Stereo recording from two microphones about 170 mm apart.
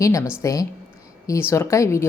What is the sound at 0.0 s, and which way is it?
A woman's voice, 20° left (ahead or behind).